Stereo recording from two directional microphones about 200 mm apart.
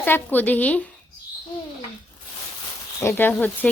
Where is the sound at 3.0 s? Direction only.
10° left (ahead or behind).